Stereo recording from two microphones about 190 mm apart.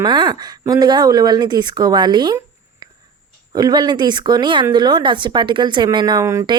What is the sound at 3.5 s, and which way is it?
Speech, 20° right (ahead or behind).